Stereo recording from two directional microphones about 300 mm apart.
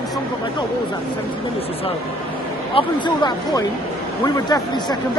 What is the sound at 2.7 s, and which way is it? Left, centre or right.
Speech, centre.